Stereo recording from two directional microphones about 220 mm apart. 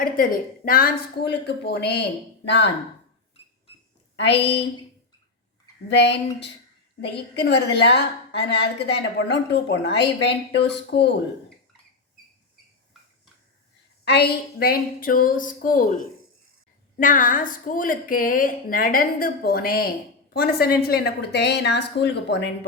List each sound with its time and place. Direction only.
0.6 s a woman's voice: 40° left (ahead or behind)
4.2 s a woman's voice: 50° left (ahead or behind)
5.9 s a woman's voice: 50° left (ahead or behind)
14.0 s a woman's voice: 50° left (ahead or behind)